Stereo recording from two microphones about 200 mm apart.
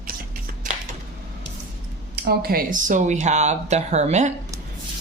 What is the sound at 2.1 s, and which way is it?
Speech, 50° right (ahead or behind).